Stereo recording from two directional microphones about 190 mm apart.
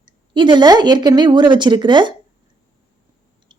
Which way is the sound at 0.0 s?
25° right (ahead or behind).